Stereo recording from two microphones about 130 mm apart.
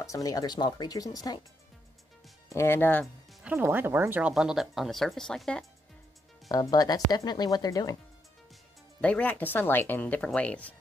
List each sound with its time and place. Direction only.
0.0 s speech: 25° left (ahead or behind)
2.5 s speech: 20° left (ahead or behind)
3.4 s speech: 15° right (ahead or behind)
4.3 s speech: 5° right (ahead or behind)
6.5 s speech: 30° left (ahead or behind)
9.0 s speech: 10° left (ahead or behind)